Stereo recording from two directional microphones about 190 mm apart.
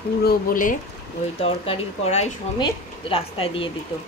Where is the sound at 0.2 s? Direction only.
50° left (ahead or behind).